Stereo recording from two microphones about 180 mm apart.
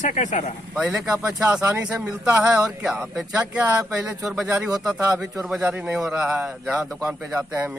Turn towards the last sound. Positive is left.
turn(degrees=-10)  # may be behind; listen again after turning